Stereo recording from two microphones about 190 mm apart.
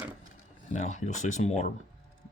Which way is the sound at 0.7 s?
40° left (ahead or behind).